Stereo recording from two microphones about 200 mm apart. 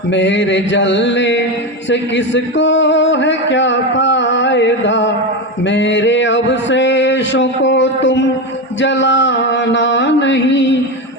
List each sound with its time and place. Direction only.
0.1 s a man's voice: 65° left (ahead or behind)
8.8 s music: 65° left (ahead or behind)